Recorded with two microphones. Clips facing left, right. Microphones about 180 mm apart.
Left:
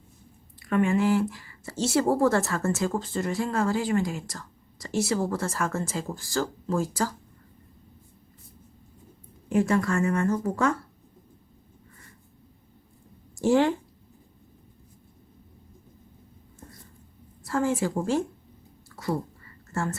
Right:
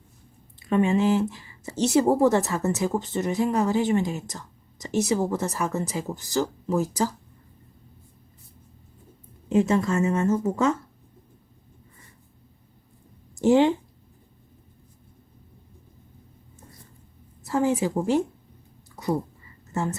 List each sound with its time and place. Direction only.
0.6 s speech: 20° right (ahead or behind)
9.5 s speech: 20° right (ahead or behind)
13.4 s speech: 20° right (ahead or behind)
17.4 s speech: 20° right (ahead or behind)
18.9 s a sound: 20° right (ahead or behind)
19.7 s speech: 20° right (ahead or behind)